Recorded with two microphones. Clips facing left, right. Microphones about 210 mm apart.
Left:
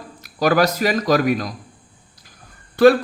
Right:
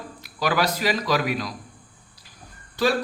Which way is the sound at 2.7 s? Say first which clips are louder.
Left 11 dB; 55° left (ahead or behind).